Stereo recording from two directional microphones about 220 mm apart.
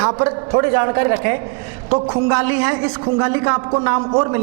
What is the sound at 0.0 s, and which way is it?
A man's voice, 25° right (ahead or behind).